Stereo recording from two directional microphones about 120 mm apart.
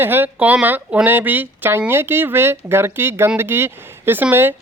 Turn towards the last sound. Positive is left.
turn(degrees=-15)  # may be behind; listen again after turning